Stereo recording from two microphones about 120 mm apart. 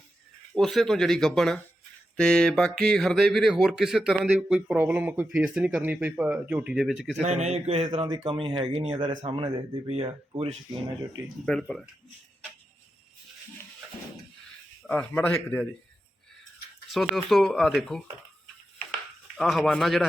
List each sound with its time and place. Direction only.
0.5 s speech: centre (ahead or behind); by 6.7 s 15° right (ahead or behind)
6.7 s speech: 5° right (ahead or behind)
7.2 s speech: 70° right (ahead or behind)
7.9 s speech: 35° right (ahead or behind); by 10.6 s 55° right (ahead or behind)
11.4 s speech: 5° left (ahead or behind)
14.8 s a man's voice: 10° left (ahead or behind)
16.9 s speech: centre (ahead or behind)
19.4 s speech: centre (ahead or behind)